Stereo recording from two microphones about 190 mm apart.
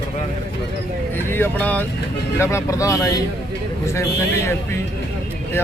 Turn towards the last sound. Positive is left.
turn(degrees=15)  # may be behind; listen again after turning